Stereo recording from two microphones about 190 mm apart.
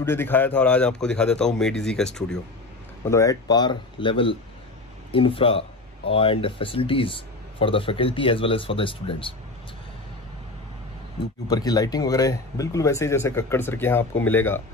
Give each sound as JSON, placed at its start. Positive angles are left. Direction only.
{"t": 0.0, "sound": "a man's voice", "side_deg": 10}
{"t": 3.1, "sound": "speech", "side_deg": 15}
{"t": 11.4, "sound": "speech", "side_deg": 20}